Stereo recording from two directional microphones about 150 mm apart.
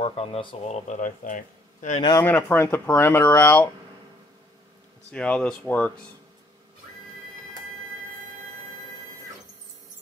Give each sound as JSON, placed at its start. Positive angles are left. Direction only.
{"t": 0.0, "sound": "speech", "side_deg": 40}
{"t": 0.7, "sound": "a man's voice", "side_deg": 60}
{"t": 2.1, "sound": "speech", "side_deg": 15}
{"t": 5.1, "sound": "speech", "side_deg": 10}